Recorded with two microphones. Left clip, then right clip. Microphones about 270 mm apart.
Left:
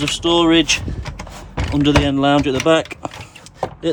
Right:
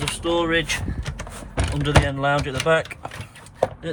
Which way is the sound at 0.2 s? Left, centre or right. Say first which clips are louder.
Left 7 dB; centre.